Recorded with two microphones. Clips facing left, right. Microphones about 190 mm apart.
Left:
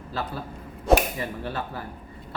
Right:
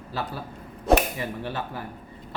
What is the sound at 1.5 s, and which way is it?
Speech, 15° right (ahead or behind).